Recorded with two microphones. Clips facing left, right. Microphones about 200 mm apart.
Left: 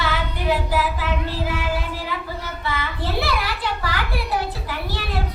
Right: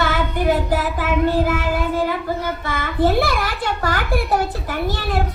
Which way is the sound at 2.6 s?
45° right (ahead or behind).